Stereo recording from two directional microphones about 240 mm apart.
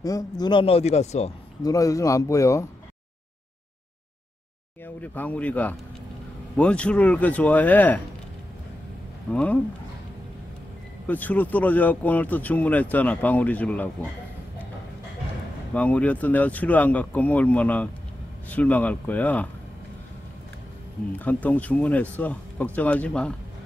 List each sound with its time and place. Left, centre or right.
0.0 s a man's voice: centre
1.6 s speech: centre
4.8 s speech: centre
9.3 s speech: centre
11.1 s speech: centre
15.7 s speech: centre
21.2 s speech: centre